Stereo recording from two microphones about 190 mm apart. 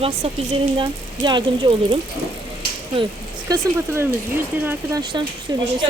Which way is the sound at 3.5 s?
15° right (ahead or behind).